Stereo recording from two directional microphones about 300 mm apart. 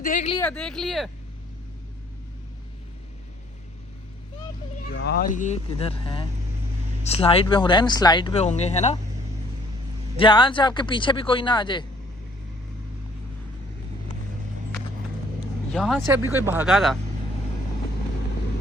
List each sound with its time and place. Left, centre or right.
0.0 s speech: left
0.3 s speech: centre
4.9 s speech: left
10.2 s speech: centre
15.7 s speech: centre